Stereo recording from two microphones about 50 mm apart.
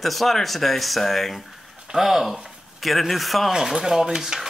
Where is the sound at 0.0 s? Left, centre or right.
Centre.